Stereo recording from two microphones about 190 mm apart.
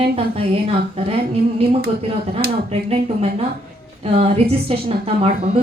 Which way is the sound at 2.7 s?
30° right (ahead or behind).